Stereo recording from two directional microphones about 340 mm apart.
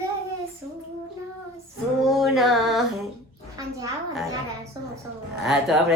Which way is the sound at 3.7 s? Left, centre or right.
Centre.